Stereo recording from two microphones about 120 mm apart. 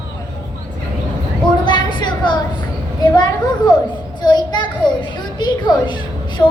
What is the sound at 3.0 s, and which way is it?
A woman's voice, 35° left (ahead or behind).